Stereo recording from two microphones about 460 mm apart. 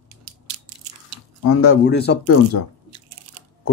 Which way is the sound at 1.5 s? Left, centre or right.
Left.